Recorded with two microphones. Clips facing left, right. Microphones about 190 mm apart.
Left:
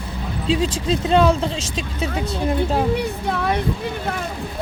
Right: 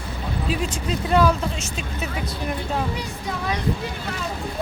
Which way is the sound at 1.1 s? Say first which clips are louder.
Left 2 dB; 25° left (ahead or behind).